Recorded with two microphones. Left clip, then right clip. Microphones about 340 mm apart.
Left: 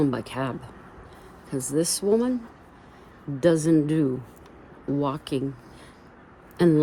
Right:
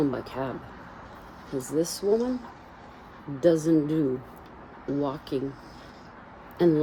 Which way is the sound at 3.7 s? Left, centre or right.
Left.